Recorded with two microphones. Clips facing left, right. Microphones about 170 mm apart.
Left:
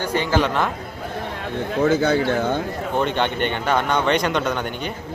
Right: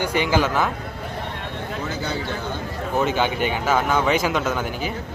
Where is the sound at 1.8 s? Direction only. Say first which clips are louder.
Left 12 dB; 50° left (ahead or behind).